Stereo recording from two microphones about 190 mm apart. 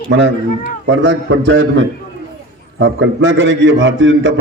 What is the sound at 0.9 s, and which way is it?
A man's voice, 70° right (ahead or behind).